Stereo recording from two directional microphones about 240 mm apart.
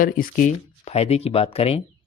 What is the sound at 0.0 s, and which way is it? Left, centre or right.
Speech, left.